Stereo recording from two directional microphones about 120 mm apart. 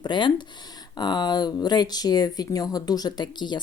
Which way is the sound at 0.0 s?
40° left (ahead or behind).